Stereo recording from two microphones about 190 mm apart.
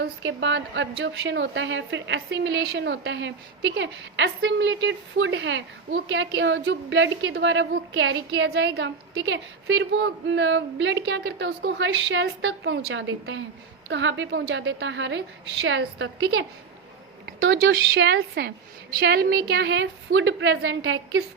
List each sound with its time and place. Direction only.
0.0 s a woman's voice: 70° right (ahead or behind)
17.6 s a woman's voice: 70° right (ahead or behind)